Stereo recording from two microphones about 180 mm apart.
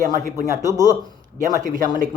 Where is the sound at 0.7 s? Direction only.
20° right (ahead or behind).